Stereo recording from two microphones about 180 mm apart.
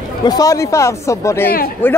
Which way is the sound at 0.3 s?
20° left (ahead or behind).